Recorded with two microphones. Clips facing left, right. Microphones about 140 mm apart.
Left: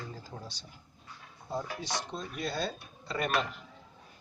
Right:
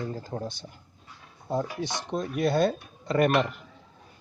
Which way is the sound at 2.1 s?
55° right (ahead or behind).